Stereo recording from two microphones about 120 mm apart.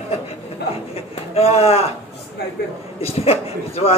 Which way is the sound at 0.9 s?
55° left (ahead or behind).